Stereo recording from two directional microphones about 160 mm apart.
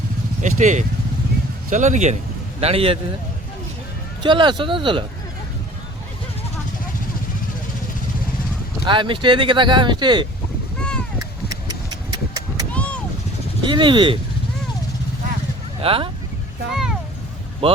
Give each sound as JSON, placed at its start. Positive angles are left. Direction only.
{"t": 0.4, "sound": "speech", "side_deg": -50}
{"t": 2.6, "sound": "speech", "side_deg": -40}
{"t": 4.2, "sound": "speech", "side_deg": -30}
{"t": 8.9, "sound": "speech", "side_deg": -30}
{"t": 10.8, "sound": "a sound", "side_deg": 5}
{"t": 11.9, "sound": "clip-clop", "side_deg": -25}
{"t": 12.7, "sound": "vehicle", "side_deg": 10}
{"t": 13.6, "sound": "speech", "side_deg": -30}
{"t": 15.8, "sound": "speech", "side_deg": -35}
{"t": 16.7, "sound": "a sound", "side_deg": -5}
{"t": 17.6, "sound": "speech", "side_deg": -35}